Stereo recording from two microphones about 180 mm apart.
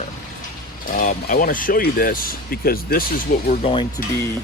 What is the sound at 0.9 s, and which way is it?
Speech, 45° left (ahead or behind).